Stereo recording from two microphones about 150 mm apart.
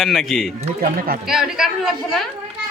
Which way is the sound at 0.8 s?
75° right (ahead or behind).